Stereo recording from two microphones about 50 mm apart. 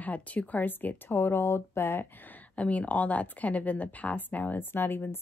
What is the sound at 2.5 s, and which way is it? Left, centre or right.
A woman's voice, left.